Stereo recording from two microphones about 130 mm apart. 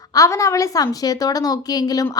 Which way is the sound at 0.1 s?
25° left (ahead or behind).